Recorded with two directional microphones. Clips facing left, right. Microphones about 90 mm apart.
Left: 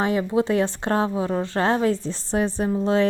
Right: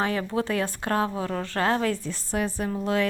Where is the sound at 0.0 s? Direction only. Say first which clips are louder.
Left 5 dB; 20° left (ahead or behind).